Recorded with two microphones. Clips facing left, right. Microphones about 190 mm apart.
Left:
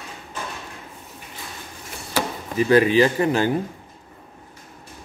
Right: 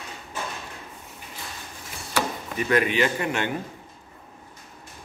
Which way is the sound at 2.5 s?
30° left (ahead or behind).